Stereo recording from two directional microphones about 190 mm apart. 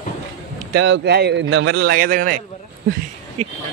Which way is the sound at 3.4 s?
35° right (ahead or behind).